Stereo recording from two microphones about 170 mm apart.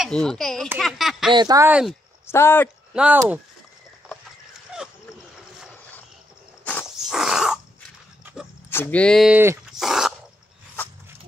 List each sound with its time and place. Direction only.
0.0 s a sound: 5° left (ahead or behind)
1.3 s speech: 25° right (ahead or behind)
1.7 s speech: 5° right (ahead or behind)
2.2 s speech: 15° left (ahead or behind)
2.9 s speech: 5° right (ahead or behind)
6.6 s a sound: 10° left (ahead or behind)
7.1 s sneeze: 5° right (ahead or behind)
8.6 s speech: 15° left (ahead or behind)
9.7 s dog: centre (ahead or behind)